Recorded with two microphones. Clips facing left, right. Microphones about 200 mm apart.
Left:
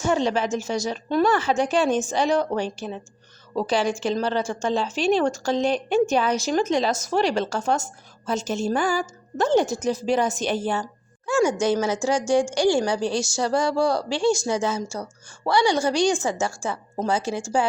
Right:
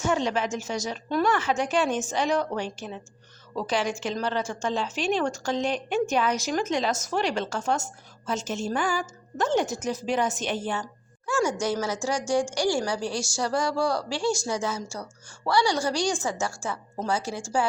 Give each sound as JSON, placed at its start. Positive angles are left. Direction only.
{"t": 0.0, "sound": "a woman's voice", "side_deg": 30}
{"t": 11.6, "sound": "a woman's voice", "side_deg": 25}